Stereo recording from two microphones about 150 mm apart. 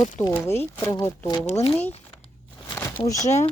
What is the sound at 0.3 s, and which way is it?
Speech, 15° left (ahead or behind).